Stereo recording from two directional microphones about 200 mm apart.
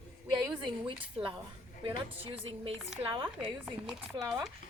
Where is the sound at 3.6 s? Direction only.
Centre (ahead or behind).